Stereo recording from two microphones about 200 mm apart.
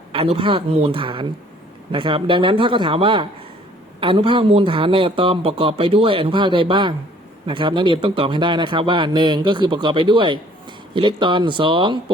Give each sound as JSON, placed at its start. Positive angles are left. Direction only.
{"t": 0.1, "sound": "a man's voice", "side_deg": -30}